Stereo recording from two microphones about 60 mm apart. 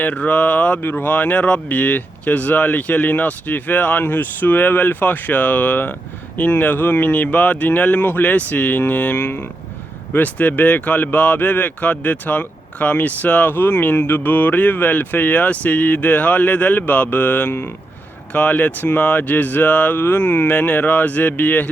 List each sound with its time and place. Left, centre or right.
0.0 s speech: left